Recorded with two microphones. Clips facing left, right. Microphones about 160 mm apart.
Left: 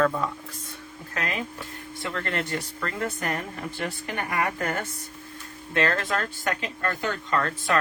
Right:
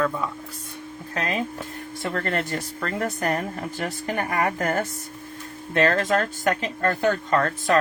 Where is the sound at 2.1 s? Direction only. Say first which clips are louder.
Right 3 dB; 45° right (ahead or behind).